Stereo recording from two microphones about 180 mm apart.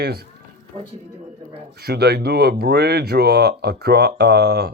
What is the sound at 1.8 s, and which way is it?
Speech, 60° right (ahead or behind).